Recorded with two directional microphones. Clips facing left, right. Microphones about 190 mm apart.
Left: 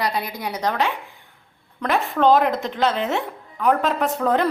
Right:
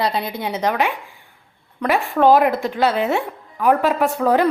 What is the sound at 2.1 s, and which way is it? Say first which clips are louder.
A woman's voice: right 3 dB; 5° right (ahead or behind).